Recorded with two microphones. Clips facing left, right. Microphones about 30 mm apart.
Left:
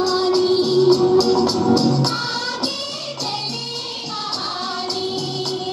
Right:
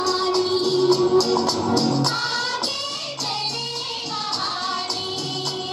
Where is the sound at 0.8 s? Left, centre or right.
Centre.